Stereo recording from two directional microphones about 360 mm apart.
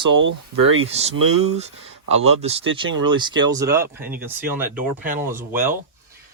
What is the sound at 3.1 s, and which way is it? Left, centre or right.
Speech, centre.